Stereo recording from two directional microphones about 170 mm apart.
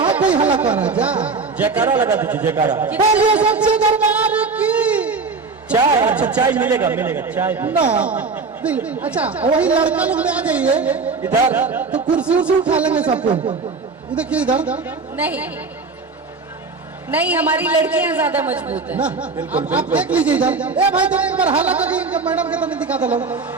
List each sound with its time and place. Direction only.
0.6 s a woman's voice: 10° right (ahead or behind)
3.2 s music: 10° right (ahead or behind)
5.8 s speech: 20° right (ahead or behind)
6.1 s a woman's voice: 5° right (ahead or behind)
14.2 s a woman's voice: 5° right (ahead or behind)
17.1 s a woman's voice: 10° right (ahead or behind)